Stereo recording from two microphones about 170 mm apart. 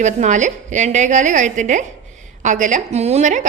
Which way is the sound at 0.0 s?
45° right (ahead or behind).